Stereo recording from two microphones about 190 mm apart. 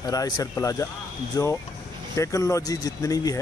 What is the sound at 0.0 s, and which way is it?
Speech, 20° left (ahead or behind).